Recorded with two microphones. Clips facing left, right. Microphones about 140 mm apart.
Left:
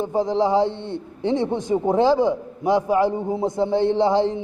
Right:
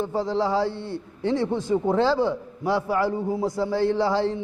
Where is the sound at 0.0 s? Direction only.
15° left (ahead or behind).